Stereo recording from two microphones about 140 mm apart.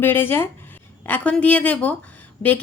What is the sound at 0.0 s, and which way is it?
A woman's voice, 15° left (ahead or behind).